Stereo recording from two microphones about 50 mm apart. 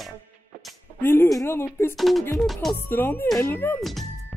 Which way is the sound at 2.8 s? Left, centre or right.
Left.